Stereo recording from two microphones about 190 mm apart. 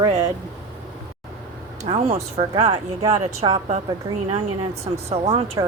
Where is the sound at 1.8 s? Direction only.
35° right (ahead or behind).